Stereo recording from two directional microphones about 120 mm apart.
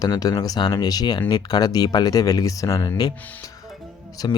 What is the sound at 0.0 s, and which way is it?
Speech, 30° left (ahead or behind).